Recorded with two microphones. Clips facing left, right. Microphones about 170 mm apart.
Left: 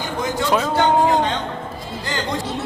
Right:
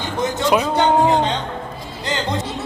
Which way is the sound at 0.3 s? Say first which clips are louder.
Right 1 dB; 20° right (ahead or behind).